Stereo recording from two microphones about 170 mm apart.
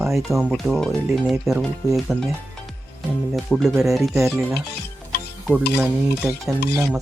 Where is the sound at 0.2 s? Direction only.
Centre (ahead or behind).